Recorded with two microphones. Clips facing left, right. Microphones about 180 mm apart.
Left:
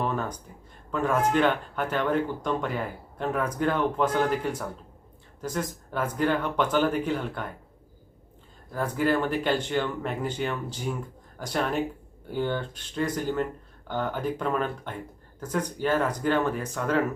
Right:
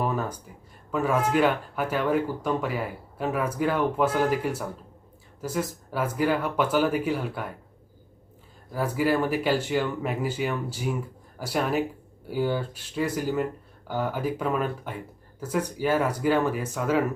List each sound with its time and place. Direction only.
0.0 s a sound: 5° right (ahead or behind)
0.9 s speech: 5° right (ahead or behind)
8.7 s speech: 5° right (ahead or behind)